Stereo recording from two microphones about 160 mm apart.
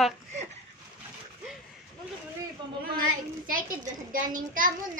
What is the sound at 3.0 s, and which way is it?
A child's voice, 60° right (ahead or behind).